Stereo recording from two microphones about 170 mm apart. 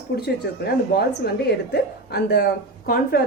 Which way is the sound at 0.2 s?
65° left (ahead or behind).